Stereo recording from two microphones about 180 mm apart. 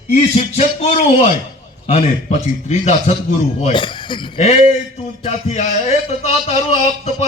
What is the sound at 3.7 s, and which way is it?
Speech, 25° left (ahead or behind).